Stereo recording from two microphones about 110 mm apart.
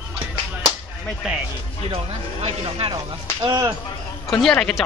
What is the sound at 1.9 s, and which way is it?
Speech, 65° right (ahead or behind).